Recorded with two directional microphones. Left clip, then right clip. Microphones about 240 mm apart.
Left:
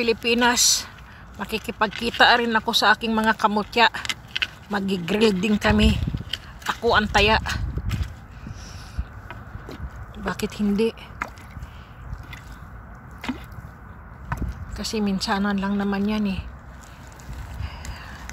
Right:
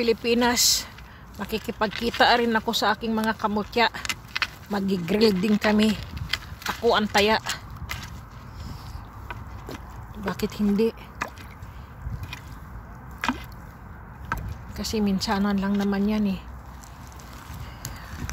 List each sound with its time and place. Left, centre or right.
0.0 s speech: centre
9.7 s a sound: centre
14.8 s speech: centre